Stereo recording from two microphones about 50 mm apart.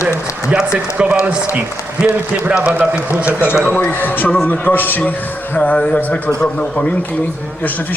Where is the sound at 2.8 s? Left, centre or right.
Right.